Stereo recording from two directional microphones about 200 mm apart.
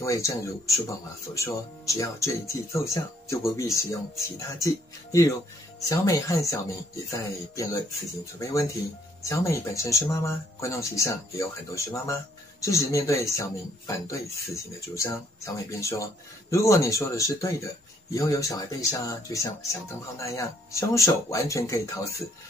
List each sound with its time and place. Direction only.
0.0 s speech: 15° left (ahead or behind)